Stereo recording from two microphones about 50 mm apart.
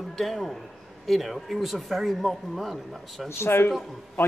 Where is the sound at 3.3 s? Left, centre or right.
Left.